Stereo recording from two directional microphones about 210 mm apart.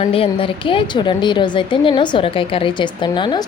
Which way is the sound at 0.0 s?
25° left (ahead or behind).